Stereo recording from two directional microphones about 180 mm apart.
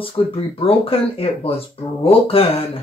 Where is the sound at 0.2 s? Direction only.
25° left (ahead or behind).